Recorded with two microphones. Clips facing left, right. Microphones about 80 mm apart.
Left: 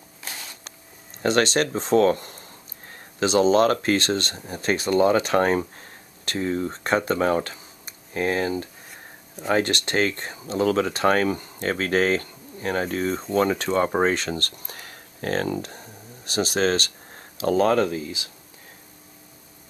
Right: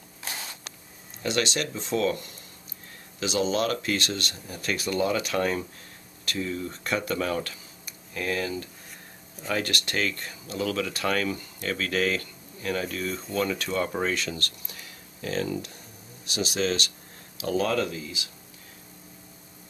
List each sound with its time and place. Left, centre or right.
1.2 s speech: left